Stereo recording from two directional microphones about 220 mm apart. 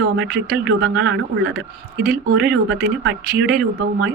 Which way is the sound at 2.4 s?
50° right (ahead or behind).